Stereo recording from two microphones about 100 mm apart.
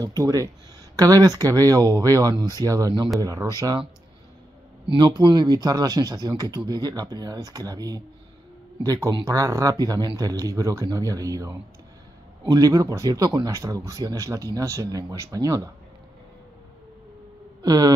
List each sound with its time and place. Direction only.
0.0 s speech: 40° right (ahead or behind)
4.8 s speech: 50° right (ahead or behind)
9.2 s speech: 30° right (ahead or behind)
17.6 s a sound: 40° right (ahead or behind)